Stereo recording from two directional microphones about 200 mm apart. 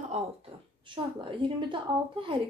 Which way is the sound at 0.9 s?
25° right (ahead or behind).